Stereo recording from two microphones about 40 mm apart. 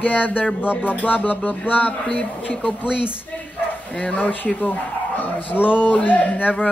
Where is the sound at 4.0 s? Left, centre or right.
Left.